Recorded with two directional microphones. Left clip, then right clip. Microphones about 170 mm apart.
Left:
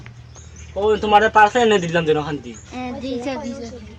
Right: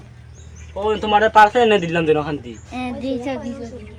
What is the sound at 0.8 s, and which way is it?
Speech, 35° left (ahead or behind).